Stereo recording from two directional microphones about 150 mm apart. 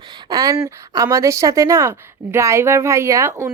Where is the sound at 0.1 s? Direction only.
25° right (ahead or behind).